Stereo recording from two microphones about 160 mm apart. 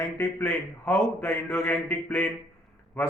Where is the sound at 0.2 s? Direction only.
15° left (ahead or behind).